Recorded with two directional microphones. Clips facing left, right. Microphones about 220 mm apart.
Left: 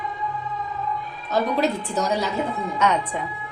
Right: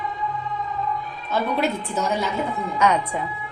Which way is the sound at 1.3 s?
35° left (ahead or behind).